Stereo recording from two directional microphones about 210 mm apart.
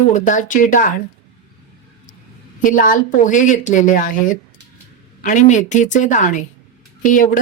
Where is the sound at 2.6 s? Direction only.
40° left (ahead or behind).